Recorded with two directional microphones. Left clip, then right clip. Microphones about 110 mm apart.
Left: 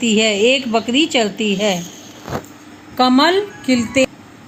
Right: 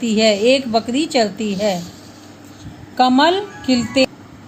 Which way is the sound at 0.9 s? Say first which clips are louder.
Left 5 dB; 40° right (ahead or behind).